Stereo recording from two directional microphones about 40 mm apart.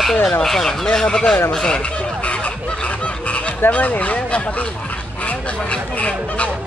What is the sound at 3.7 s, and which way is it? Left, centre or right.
Speech, left.